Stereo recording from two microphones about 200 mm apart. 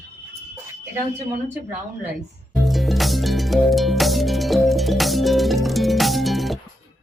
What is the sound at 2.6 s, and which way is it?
Music, centre (ahead or behind).